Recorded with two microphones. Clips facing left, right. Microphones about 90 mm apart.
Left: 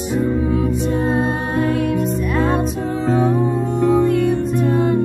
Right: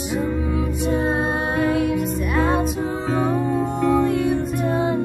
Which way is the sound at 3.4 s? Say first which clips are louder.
Left 3 dB; 20° left (ahead or behind).